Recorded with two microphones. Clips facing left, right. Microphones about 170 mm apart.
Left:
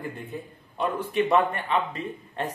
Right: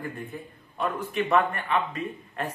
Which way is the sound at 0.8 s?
30° left (ahead or behind).